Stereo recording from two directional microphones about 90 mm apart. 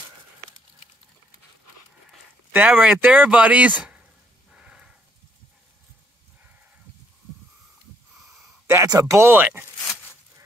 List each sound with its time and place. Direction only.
2.5 s speech: 20° right (ahead or behind)
4.5 s a sound: 10° right (ahead or behind)
8.8 s speech: 40° right (ahead or behind)
9.3 s speech: 20° right (ahead or behind)